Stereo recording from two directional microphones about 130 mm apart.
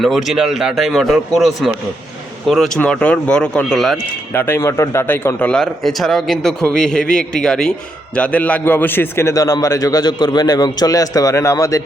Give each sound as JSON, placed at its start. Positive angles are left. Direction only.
{"t": 0.0, "sound": "a man's voice", "side_deg": 0}
{"t": 4.4, "sound": "a man's voice", "side_deg": 20}